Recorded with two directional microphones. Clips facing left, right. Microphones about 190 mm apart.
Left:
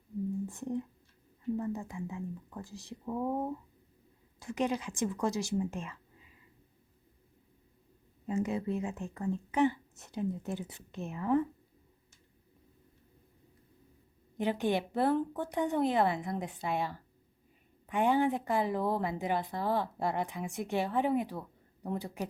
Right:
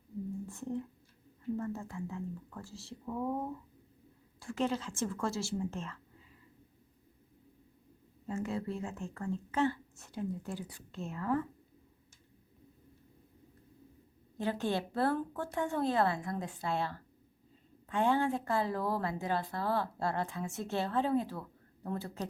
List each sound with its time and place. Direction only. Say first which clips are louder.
0.4 s a woman's voice: left 2 dB; 15° left (ahead or behind)
8.3 s speech: left 4 dB; 20° left (ahead or behind)
14.3 s a woman's voice: left 3 dB; 15° left (ahead or behind)